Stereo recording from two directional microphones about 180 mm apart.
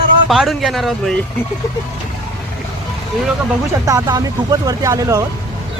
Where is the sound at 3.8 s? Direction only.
20° right (ahead or behind).